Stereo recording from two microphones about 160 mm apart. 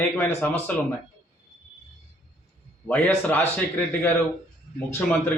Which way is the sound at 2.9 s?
10° left (ahead or behind).